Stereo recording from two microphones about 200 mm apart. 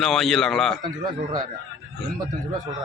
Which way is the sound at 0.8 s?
20° right (ahead or behind).